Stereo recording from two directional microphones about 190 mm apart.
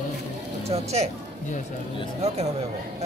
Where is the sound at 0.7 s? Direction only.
35° right (ahead or behind).